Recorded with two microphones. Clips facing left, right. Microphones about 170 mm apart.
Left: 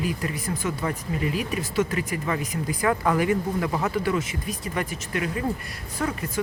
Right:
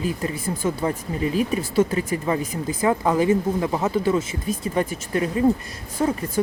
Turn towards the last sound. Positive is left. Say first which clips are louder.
# right 5 dB
turn(degrees=-25)  # may be behind; listen again after turning